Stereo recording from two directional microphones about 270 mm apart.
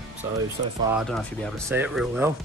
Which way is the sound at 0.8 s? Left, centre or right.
Centre.